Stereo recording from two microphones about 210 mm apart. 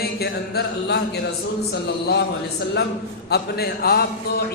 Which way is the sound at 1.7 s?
50° left (ahead or behind).